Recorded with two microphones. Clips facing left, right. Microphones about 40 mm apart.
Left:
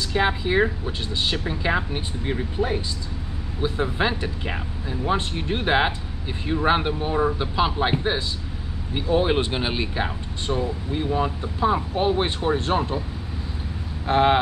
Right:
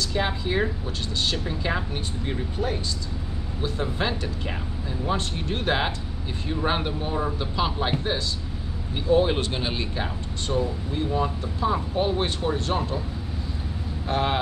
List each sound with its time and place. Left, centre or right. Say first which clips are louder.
0.1 s speech: left 7 dB; centre
14.0 s speech: left 7 dB; left